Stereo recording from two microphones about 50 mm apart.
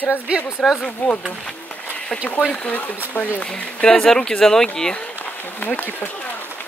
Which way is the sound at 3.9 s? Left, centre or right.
Centre.